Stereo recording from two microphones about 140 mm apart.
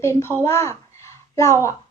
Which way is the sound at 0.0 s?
20° left (ahead or behind).